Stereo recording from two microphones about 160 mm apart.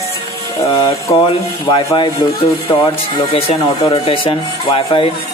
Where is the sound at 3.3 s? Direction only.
35° left (ahead or behind).